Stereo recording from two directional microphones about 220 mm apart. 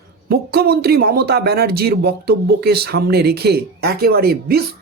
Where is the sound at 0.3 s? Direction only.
45° right (ahead or behind).